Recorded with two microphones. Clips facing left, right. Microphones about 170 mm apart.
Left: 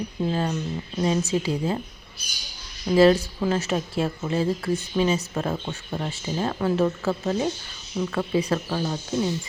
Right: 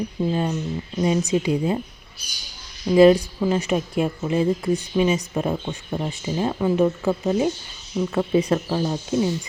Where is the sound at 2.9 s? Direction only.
15° right (ahead or behind).